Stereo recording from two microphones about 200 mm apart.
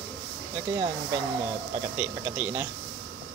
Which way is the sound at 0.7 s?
15° right (ahead or behind).